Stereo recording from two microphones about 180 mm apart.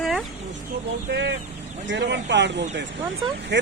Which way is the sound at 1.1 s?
70° right (ahead or behind).